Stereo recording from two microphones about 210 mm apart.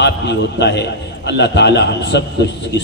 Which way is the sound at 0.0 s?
55° left (ahead or behind).